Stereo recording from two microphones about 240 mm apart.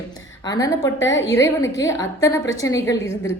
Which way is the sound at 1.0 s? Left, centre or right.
Left.